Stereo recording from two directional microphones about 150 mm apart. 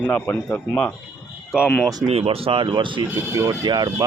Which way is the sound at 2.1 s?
40° right (ahead or behind).